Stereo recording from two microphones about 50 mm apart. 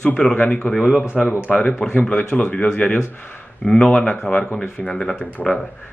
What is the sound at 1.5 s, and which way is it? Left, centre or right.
Speech, left.